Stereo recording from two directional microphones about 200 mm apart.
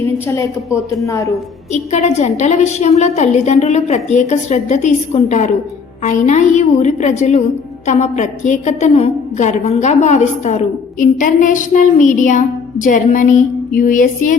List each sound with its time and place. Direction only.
0.3 s a woman's voice: 15° left (ahead or behind)
1.7 s a woman's voice: 35° left (ahead or behind)